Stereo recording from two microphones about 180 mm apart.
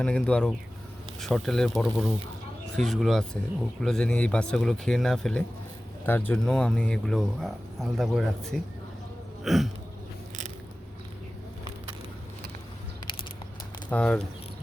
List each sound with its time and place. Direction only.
0.0 s speech: 5° left (ahead or behind)
9.4 s hiccup: centre (ahead or behind)
13.1 s a sound: 30° left (ahead or behind)
13.9 s speech: 5° left (ahead or behind)